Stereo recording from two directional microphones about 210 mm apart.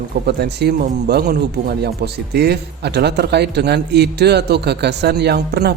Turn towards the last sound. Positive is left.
turn(degrees=-50)  # may be behind; listen again after turning